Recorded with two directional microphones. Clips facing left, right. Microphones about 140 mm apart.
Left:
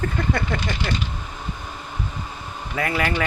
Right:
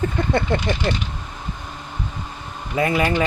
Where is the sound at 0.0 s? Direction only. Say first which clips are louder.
Right 3 dB; 20° right (ahead or behind).